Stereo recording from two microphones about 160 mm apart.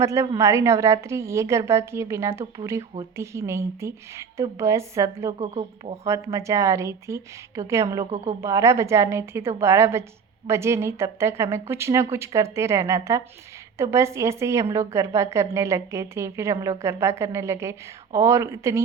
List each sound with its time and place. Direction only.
0.0 s a woman's voice: 20° right (ahead or behind)
8.1 s a woman's voice: 40° right (ahead or behind)
8.4 s a woman's voice: 20° right (ahead or behind)